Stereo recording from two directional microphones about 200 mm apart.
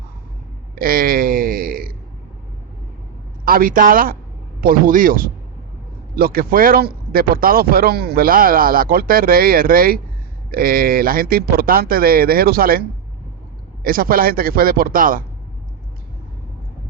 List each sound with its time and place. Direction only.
0.8 s speech: 45° right (ahead or behind)
3.4 s speech: 45° right (ahead or behind)
13.8 s speech: 45° right (ahead or behind)